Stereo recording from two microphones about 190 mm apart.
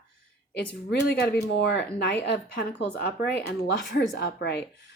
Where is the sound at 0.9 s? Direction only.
60° left (ahead or behind).